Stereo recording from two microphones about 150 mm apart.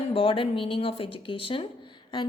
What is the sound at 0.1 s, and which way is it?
A woman's voice, 35° left (ahead or behind).